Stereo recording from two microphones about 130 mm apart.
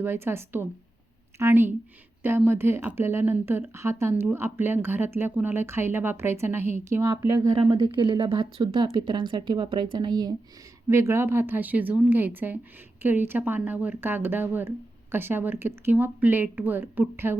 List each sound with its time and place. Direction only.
0.0 s speech: 15° right (ahead or behind)
7.6 s speech: 35° right (ahead or behind)
10.8 s speech: 20° right (ahead or behind)